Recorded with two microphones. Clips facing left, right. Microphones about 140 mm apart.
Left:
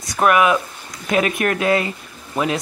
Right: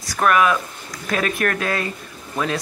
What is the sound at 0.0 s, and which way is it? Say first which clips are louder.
Speech: left 2 dB; 20° left (ahead or behind).